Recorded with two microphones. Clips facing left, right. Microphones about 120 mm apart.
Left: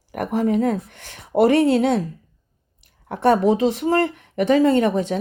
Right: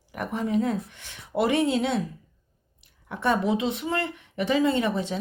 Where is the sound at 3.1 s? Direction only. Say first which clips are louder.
Left 7 dB; 45° left (ahead or behind).